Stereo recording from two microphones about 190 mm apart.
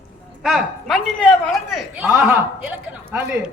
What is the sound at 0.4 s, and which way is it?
A man's voice, centre (ahead or behind).